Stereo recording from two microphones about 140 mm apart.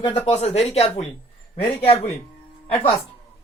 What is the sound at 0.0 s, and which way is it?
Speech, 50° left (ahead or behind).